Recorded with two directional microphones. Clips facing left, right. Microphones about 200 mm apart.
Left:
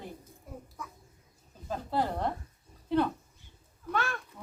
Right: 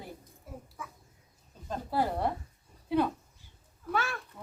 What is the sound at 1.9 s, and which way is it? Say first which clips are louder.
Speech: right 1 dB; 10° right (ahead or behind).